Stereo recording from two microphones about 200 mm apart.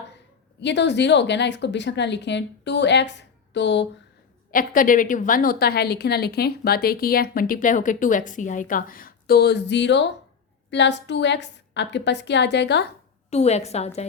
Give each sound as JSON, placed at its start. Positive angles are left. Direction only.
{"t": 0.6, "sound": "a woman's voice", "side_deg": 60}
{"t": 4.5, "sound": "a woman's voice", "side_deg": 45}
{"t": 13.3, "sound": "a woman's voice", "side_deg": 35}